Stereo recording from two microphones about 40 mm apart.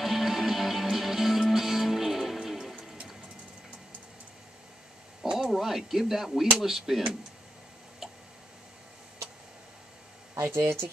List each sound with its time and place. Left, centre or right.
0.0 s music: centre
5.2 s a sound: centre
5.5 s speech: centre
10.4 s speech: right